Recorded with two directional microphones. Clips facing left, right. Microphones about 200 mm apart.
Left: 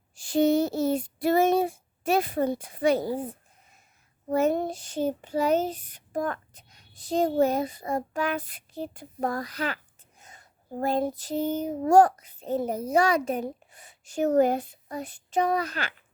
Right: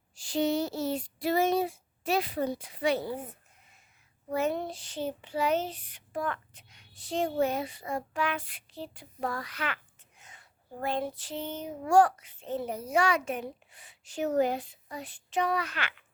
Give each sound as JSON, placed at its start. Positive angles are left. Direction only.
{"t": 0.2, "sound": "speech", "side_deg": 50}
{"t": 4.3, "sound": "child singing", "side_deg": 45}
{"t": 11.2, "sound": "a child's voice", "side_deg": 40}